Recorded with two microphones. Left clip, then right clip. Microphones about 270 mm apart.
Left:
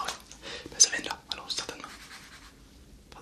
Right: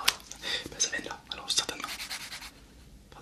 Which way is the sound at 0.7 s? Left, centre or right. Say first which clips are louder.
Left 7 dB; centre.